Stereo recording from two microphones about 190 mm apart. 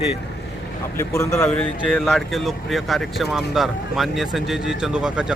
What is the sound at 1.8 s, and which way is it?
Speech, 5° left (ahead or behind).